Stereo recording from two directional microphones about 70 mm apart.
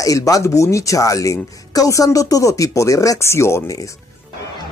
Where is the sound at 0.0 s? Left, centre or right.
Left.